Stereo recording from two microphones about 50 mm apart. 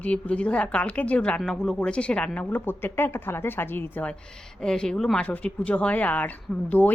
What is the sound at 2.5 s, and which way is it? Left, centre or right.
Speech, left.